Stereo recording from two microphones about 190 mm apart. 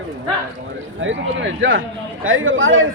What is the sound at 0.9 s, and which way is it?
Speech, 75° right (ahead or behind).